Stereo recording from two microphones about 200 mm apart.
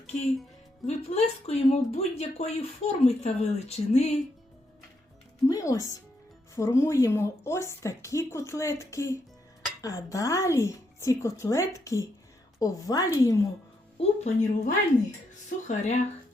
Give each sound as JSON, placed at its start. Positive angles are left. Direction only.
{"t": 0.9, "sound": "speech", "side_deg": 30}
{"t": 5.5, "sound": "a woman's voice", "side_deg": 15}
{"t": 14.0, "sound": "speech", "side_deg": 35}